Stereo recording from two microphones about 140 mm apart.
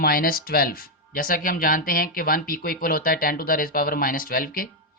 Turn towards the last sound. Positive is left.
turn(degrees=90)